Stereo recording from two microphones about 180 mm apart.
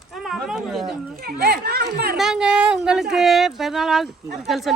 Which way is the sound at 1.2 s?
60° right (ahead or behind).